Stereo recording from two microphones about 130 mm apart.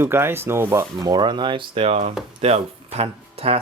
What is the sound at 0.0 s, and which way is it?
Speech, 15° right (ahead or behind).